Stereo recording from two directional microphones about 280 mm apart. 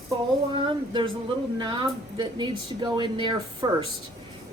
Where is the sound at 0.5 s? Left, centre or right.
Centre.